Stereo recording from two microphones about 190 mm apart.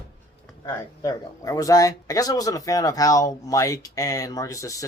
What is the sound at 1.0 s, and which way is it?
Speech, 20° left (ahead or behind).